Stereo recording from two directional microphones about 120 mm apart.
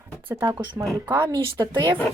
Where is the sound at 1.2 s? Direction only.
30° right (ahead or behind).